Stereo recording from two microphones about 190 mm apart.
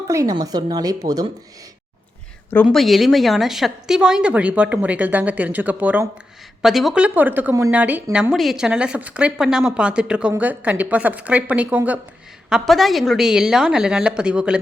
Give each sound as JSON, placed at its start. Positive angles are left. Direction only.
{"t": 0.1, "sound": "a woman's voice", "side_deg": -20}
{"t": 2.6, "sound": "a woman's voice", "side_deg": 0}